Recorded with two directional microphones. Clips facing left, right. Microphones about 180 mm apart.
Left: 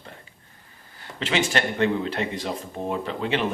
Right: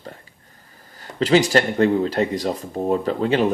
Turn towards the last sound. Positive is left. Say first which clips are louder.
# right 7 dB
turn(degrees=-40)  # may be behind; listen again after turning